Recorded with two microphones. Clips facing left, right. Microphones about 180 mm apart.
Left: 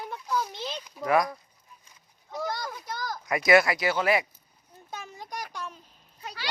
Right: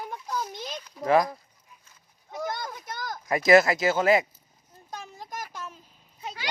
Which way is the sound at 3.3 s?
25° right (ahead or behind).